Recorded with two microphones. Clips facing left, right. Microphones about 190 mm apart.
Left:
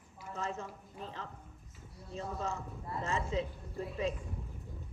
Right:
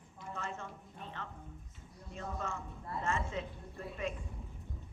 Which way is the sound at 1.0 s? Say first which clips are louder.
Left 1 dB; 35° left (ahead or behind).